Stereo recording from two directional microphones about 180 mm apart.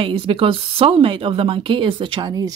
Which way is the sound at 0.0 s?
30° right (ahead or behind).